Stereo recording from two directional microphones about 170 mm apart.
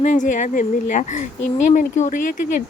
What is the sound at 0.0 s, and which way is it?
Speech, 45° left (ahead or behind).